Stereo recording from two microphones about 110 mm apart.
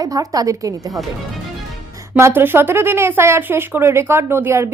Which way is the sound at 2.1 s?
20° right (ahead or behind).